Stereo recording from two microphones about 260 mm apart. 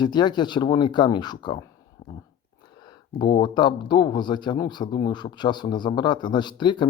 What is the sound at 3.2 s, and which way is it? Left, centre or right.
Speech, centre.